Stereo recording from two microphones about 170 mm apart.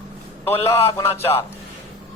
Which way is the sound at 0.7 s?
15° left (ahead or behind).